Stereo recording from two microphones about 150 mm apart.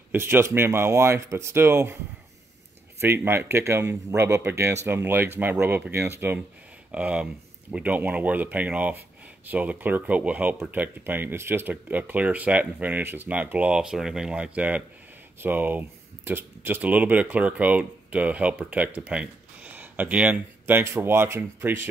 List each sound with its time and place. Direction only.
0.1 s speech: 15° right (ahead or behind)
3.0 s speech: 15° right (ahead or behind)